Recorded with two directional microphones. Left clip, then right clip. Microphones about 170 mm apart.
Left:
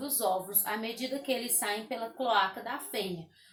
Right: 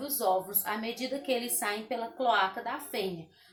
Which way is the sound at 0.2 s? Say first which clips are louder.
Right 2 dB; 10° right (ahead or behind).